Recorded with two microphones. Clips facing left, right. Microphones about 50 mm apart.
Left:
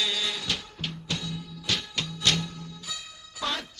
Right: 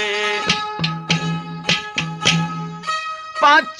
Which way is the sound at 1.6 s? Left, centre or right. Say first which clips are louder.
Right 9 dB; right.